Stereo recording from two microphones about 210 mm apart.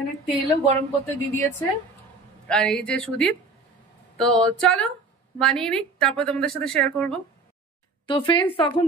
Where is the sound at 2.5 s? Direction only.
5° left (ahead or behind).